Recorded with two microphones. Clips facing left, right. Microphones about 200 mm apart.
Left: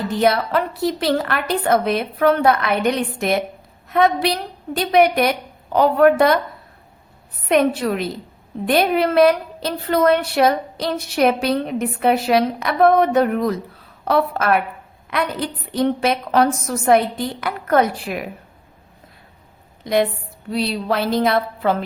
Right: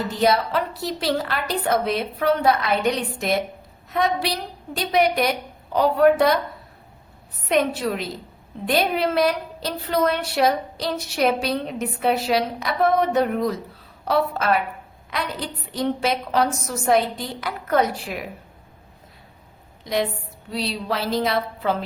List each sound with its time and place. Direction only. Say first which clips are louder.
0.2 s a woman's voice: left 2 dB; 60° left (ahead or behind)
7.4 s a woman's voice: left 4 dB; 60° left (ahead or behind)
20.5 s a woman's voice: left 5 dB; 55° left (ahead or behind)